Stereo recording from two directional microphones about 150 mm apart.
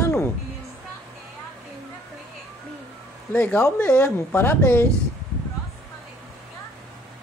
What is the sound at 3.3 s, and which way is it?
Speech, 10° left (ahead or behind).